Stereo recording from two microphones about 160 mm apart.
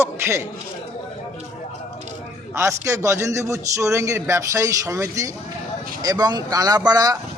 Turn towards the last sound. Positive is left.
turn(degrees=-25)  # may be behind; listen again after turning